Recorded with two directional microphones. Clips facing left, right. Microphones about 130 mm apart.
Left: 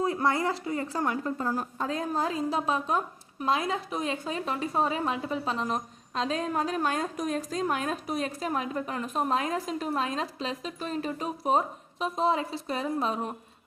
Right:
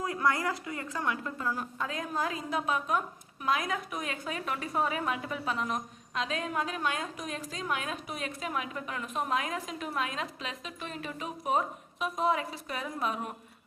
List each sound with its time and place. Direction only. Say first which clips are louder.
0.0 s a woman's voice: left 3 dB; 25° left (ahead or behind)